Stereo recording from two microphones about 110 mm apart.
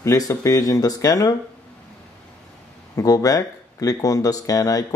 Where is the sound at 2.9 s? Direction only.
30° left (ahead or behind).